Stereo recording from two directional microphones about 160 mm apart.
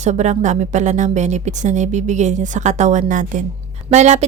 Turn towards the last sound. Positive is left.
turn(degrees=-45)  # may be behind; listen again after turning